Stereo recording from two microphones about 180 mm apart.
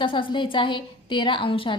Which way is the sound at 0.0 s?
30° left (ahead or behind).